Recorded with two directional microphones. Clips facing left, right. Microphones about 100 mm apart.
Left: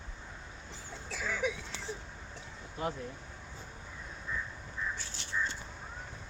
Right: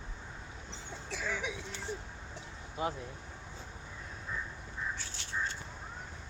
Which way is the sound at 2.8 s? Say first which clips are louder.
Right 1 dB; 15° right (ahead or behind).